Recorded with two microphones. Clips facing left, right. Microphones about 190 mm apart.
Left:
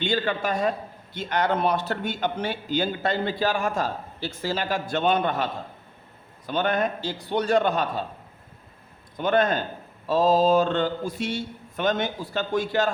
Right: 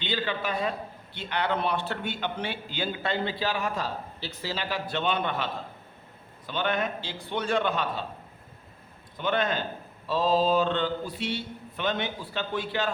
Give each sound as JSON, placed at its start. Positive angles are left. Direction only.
{"t": 0.0, "sound": "a man's voice", "side_deg": 45}
{"t": 9.1, "sound": "a man's voice", "side_deg": 45}